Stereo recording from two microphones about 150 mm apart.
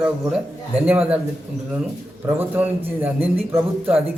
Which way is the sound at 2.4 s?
15° right (ahead or behind).